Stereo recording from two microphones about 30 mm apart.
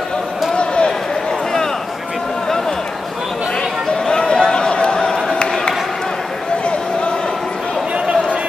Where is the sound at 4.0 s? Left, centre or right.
Left.